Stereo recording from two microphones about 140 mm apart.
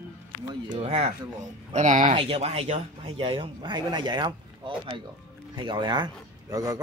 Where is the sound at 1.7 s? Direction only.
65° right (ahead or behind).